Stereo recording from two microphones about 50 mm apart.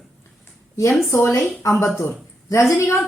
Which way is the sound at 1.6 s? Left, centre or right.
Left.